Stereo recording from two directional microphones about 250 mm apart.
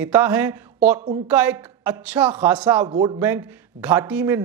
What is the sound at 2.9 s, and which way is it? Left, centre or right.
A man's voice, centre.